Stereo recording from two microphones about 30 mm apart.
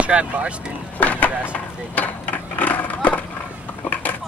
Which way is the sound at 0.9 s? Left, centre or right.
Left.